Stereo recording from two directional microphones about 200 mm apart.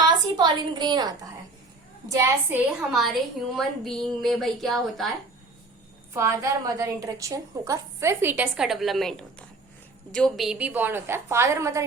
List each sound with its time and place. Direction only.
0.0 s a woman's voice: 20° right (ahead or behind)
3.5 s speech: centre (ahead or behind)
6.1 s a woman's voice: 15° right (ahead or behind)